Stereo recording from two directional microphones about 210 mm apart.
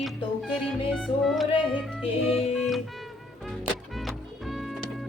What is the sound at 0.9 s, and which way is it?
Music, centre (ahead or behind).